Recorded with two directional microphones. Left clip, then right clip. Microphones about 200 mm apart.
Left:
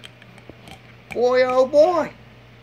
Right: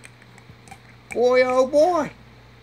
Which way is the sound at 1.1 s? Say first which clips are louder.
Even; 25° right (ahead or behind).